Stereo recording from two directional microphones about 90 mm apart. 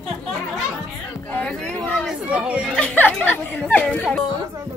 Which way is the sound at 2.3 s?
15° right (ahead or behind).